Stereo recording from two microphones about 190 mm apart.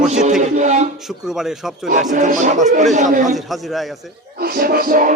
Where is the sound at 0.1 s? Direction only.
35° right (ahead or behind).